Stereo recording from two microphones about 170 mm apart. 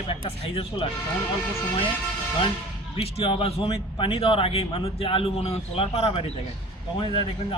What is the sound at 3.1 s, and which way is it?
A man's voice, 30° left (ahead or behind).